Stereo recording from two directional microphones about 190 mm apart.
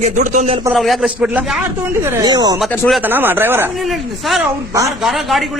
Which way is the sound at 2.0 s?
20° right (ahead or behind).